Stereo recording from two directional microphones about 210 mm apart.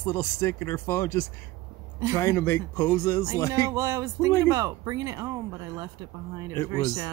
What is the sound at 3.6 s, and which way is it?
Speech, 15° right (ahead or behind).